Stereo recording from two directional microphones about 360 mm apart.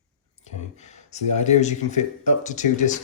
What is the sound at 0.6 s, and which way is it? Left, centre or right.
Speech, centre.